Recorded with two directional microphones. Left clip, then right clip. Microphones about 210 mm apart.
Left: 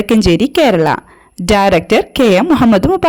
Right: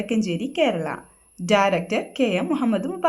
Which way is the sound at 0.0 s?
50° left (ahead or behind).